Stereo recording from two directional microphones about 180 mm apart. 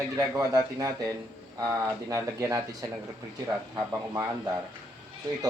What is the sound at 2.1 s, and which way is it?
Speech, 15° right (ahead or behind).